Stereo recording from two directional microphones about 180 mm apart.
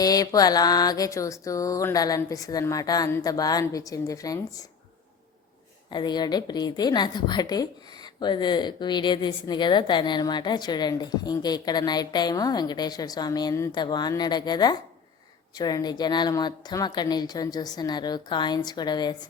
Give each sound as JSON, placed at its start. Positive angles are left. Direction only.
{"t": 0.0, "sound": "a woman's voice", "side_deg": 20}
{"t": 5.9, "sound": "a woman's voice", "side_deg": 25}